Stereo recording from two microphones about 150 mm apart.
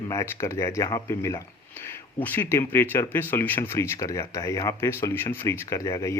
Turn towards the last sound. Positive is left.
turn(degrees=20)  # may be behind; listen again after turning